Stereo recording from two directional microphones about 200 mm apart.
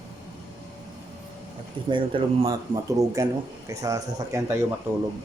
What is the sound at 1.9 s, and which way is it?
Speech, 20° right (ahead or behind).